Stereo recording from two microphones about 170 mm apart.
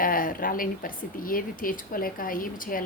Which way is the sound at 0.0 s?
55° left (ahead or behind).